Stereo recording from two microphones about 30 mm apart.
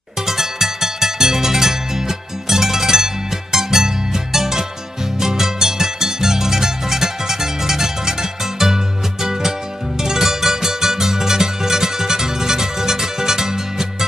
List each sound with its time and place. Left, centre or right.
0.3 s music: centre